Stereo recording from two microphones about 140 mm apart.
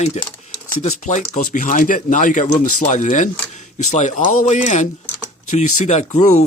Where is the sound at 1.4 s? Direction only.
70° left (ahead or behind).